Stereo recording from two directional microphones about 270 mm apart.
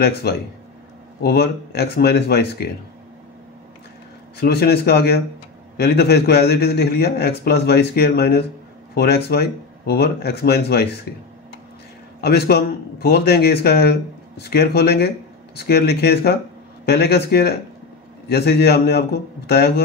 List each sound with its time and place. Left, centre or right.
0.0 s a man's voice: left
4.4 s a man's voice: left
12.2 s a man's voice: left